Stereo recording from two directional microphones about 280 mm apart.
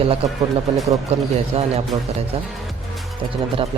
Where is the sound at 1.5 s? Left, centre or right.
Right.